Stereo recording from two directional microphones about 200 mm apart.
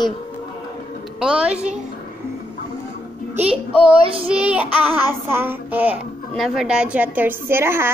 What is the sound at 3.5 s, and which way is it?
Child singing, 30° right (ahead or behind).